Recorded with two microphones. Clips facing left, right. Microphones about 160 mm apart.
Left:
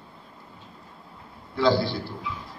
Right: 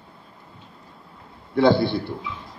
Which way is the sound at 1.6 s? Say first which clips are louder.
Right 4 dB; 55° right (ahead or behind).